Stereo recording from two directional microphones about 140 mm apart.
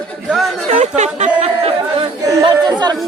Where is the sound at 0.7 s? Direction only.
55° right (ahead or behind).